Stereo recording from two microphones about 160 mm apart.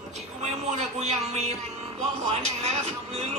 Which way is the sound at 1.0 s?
40° right (ahead or behind).